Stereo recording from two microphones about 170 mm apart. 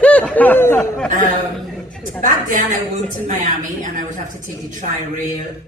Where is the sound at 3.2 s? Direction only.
50° right (ahead or behind).